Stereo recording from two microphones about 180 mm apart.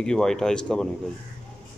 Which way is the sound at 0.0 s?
5° left (ahead or behind).